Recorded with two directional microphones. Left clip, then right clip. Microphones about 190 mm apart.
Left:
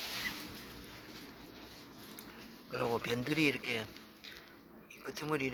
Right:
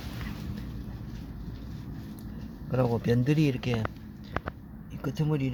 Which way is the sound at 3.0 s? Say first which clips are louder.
Right 5 dB; 15° right (ahead or behind).